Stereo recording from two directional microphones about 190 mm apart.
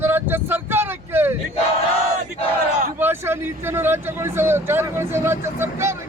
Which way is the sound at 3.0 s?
10° right (ahead or behind).